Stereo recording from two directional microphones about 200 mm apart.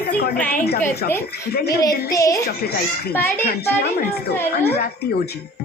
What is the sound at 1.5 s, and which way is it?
Speech, 50° left (ahead or behind).